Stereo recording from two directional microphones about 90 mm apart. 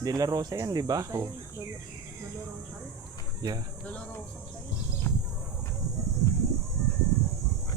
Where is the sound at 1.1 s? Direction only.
30° right (ahead or behind).